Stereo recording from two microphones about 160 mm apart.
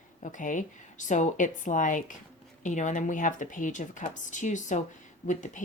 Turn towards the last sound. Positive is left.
turn(degrees=50)  # may be behind; listen again after turning